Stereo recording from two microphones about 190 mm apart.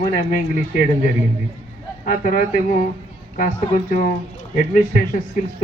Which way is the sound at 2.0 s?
45° left (ahead or behind).